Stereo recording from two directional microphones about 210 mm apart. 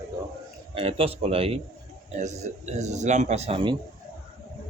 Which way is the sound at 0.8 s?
25° right (ahead or behind).